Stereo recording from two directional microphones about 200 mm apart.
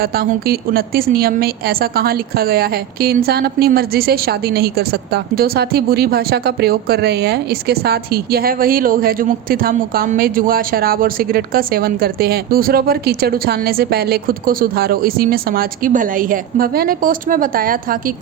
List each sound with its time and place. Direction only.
0.0 s a woman's voice: 50° right (ahead or behind)